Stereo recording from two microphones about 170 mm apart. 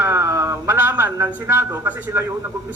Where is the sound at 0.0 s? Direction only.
15° right (ahead or behind).